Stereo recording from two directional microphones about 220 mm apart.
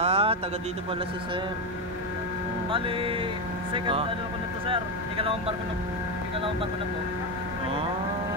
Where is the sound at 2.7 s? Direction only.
25° right (ahead or behind).